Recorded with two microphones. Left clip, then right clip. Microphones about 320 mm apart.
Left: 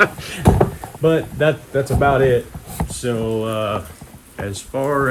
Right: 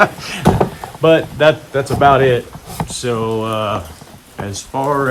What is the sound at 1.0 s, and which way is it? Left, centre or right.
Speech, right.